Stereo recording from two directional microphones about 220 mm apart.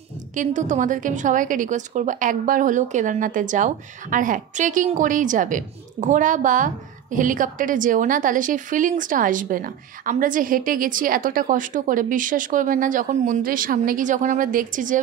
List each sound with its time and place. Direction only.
0.4 s a woman's voice: 35° right (ahead or behind)